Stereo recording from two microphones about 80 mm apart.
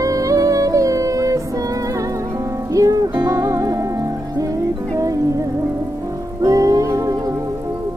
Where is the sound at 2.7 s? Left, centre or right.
Right.